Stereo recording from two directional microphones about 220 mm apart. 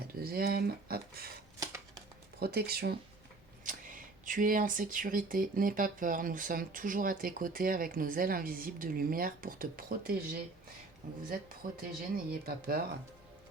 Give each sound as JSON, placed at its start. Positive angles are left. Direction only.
{"t": 0.1, "sound": "speech", "side_deg": -45}
{"t": 1.5, "sound": "a sound", "side_deg": -15}
{"t": 2.4, "sound": "speech", "side_deg": -45}
{"t": 11.8, "sound": "speech", "side_deg": -40}